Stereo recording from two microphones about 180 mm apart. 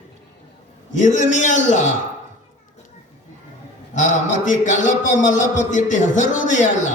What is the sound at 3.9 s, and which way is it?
A man's voice, 45° left (ahead or behind).